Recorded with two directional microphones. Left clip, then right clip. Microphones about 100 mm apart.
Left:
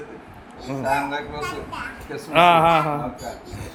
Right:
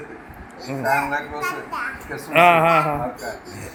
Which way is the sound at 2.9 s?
Centre (ahead or behind).